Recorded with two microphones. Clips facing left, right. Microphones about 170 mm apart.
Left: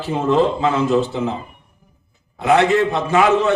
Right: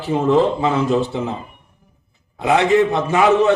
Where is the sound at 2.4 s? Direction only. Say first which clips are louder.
Even; 15° right (ahead or behind).